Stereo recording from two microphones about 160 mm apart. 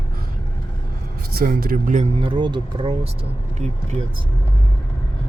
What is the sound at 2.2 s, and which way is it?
Speech, 30° right (ahead or behind).